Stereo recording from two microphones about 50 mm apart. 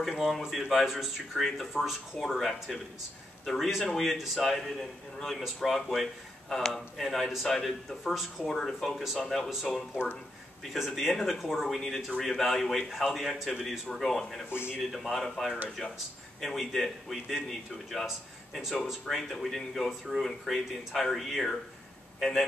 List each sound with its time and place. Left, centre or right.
0.0 s speech: centre
8.5 s speech: centre
14.5 s speech: left
14.8 s a man's voice: centre
19.0 s speech: centre
19.9 s speech: centre